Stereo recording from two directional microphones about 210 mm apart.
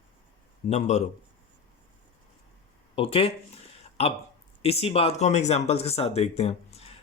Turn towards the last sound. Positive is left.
turn(degrees=30)  # may be behind; listen again after turning